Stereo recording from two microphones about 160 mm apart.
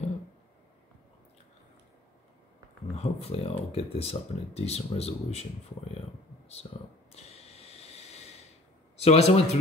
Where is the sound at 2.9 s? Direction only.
40° left (ahead or behind).